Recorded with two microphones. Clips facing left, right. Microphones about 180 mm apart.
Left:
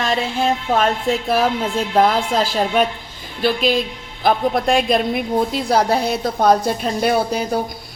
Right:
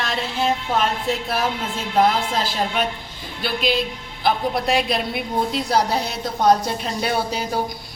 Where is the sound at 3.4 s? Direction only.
45° left (ahead or behind).